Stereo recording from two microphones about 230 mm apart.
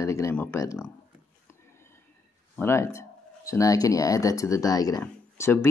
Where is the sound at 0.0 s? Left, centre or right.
Centre.